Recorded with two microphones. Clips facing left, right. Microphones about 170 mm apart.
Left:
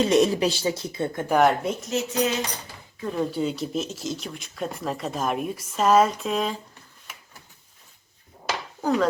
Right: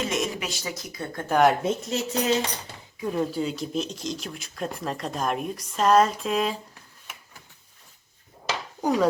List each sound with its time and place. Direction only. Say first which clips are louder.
0.0 s speech: left 9 dB; 35° left (ahead or behind)
1.3 s speech: even; centre (ahead or behind)
1.6 s speech: even; 30° right (ahead or behind)
3.0 s speech: even; 5° right (ahead or behind)
8.8 s dishes: even; 15° right (ahead or behind)